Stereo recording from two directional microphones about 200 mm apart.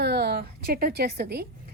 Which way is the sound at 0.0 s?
55° right (ahead or behind).